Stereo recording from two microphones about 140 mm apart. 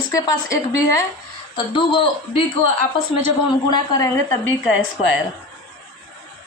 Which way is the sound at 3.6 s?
30° left (ahead or behind).